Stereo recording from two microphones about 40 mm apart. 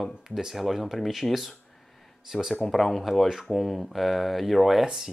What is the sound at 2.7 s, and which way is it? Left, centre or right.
Speech, centre.